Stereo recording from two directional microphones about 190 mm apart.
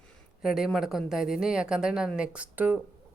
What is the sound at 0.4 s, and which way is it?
A woman's voice, centre (ahead or behind).